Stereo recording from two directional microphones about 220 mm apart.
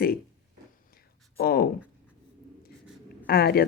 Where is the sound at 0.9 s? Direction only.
45° left (ahead or behind).